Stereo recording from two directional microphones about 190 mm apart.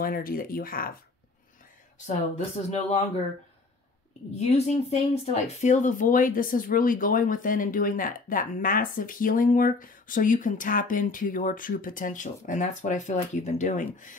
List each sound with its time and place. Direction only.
0.0 s speech: 50° left (ahead or behind)
2.0 s speech: 40° left (ahead or behind)
4.4 s speech: 35° left (ahead or behind)